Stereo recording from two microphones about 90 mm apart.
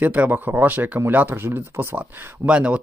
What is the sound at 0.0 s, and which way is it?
Speech, 15° right (ahead or behind).